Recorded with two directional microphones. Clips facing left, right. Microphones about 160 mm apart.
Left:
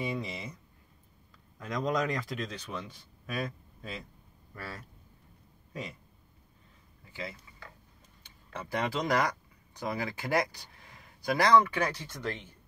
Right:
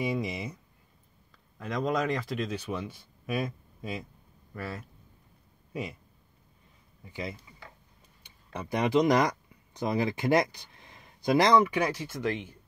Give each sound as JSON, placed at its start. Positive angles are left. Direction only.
{"t": 0.0, "sound": "speech", "side_deg": -10}
{"t": 1.6, "sound": "speech", "side_deg": 0}
{"t": 5.7, "sound": "speech", "side_deg": -10}
{"t": 7.1, "sound": "speech", "side_deg": -20}